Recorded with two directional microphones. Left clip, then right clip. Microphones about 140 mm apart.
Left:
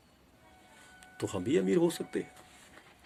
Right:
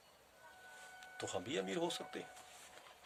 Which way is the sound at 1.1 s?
30° right (ahead or behind).